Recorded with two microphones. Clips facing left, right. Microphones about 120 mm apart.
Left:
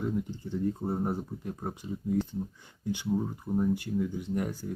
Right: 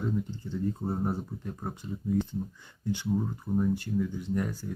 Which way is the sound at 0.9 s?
5° left (ahead or behind).